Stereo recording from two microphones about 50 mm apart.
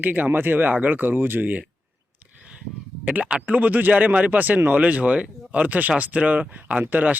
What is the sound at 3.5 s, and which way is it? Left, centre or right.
Speech, right.